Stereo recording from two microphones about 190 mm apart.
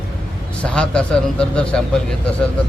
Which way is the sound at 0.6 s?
5° left (ahead or behind).